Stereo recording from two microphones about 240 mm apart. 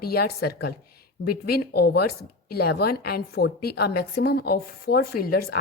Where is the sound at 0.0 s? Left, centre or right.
Left.